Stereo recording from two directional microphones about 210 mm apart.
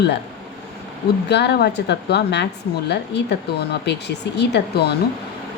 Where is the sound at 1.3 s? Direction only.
55° left (ahead or behind).